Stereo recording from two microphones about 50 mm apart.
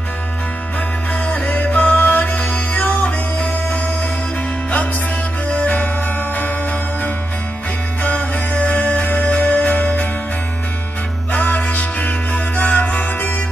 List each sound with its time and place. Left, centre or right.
1.2 s music: left
5.6 s music: left
8.0 s music: left
11.3 s music: left